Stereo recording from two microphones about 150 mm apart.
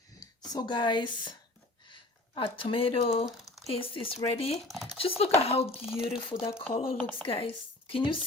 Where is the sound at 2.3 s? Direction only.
35° left (ahead or behind).